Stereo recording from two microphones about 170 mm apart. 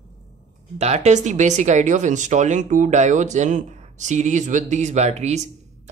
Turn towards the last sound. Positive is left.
turn(degrees=-40)  # may be behind; listen again after turning